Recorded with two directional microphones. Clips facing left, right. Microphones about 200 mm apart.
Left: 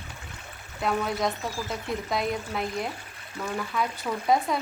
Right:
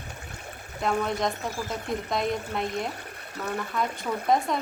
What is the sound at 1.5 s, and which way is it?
Speech, 50° right (ahead or behind).